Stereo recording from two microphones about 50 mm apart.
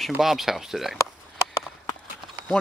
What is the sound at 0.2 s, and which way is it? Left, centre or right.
Speech, centre.